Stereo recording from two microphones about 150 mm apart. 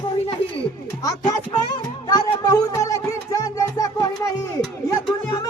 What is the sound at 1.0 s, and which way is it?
Music, 25° left (ahead or behind).